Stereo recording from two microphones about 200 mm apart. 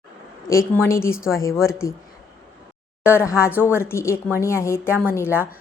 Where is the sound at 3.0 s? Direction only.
15° left (ahead or behind).